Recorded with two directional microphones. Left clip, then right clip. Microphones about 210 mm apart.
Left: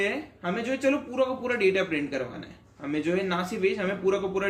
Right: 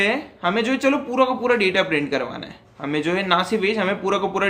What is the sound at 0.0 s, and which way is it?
Speech, 15° right (ahead or behind).